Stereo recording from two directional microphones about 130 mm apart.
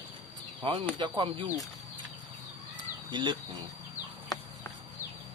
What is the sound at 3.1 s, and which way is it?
Speech, 35° right (ahead or behind).